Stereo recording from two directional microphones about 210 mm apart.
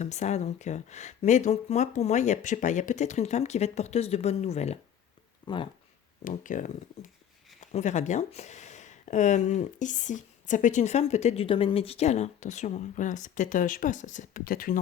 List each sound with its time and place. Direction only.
0.0 s speech: 35° left (ahead or behind)
5.5 s speech: 20° left (ahead or behind)
6.2 s speech: 40° left (ahead or behind)